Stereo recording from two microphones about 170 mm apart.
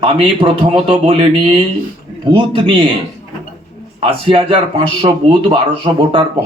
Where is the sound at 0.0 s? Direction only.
30° right (ahead or behind).